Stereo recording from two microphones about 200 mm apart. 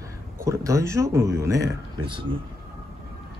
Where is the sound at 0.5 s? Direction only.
15° right (ahead or behind).